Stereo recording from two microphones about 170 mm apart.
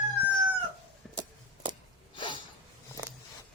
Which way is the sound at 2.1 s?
30° left (ahead or behind).